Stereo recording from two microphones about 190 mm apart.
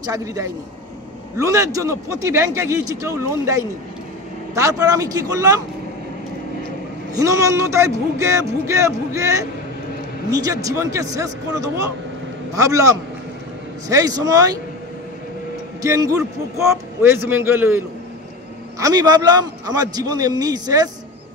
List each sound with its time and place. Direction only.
0.0 s speech: 20° right (ahead or behind)
7.2 s a man's voice: 15° right (ahead or behind)
15.8 s a man's voice: 15° right (ahead or behind)